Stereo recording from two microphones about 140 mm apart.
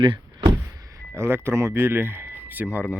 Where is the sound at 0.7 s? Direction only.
25° right (ahead or behind).